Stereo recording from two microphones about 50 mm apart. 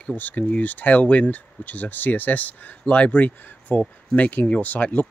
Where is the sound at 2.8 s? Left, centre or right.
Left.